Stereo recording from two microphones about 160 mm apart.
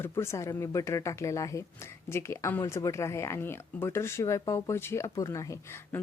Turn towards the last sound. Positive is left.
turn(degrees=15)  # may be behind; listen again after turning